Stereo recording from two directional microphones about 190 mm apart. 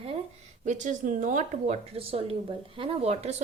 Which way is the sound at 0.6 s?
40° right (ahead or behind).